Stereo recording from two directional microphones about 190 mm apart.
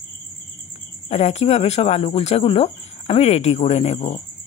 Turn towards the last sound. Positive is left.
turn(degrees=35)  # may be behind; listen again after turning